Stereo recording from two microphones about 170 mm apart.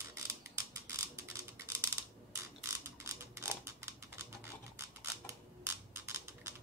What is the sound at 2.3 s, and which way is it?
Mechanisms, 15° right (ahead or behind).